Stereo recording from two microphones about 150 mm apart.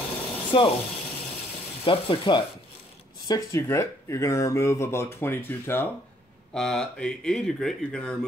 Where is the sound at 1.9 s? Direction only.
30° left (ahead or behind).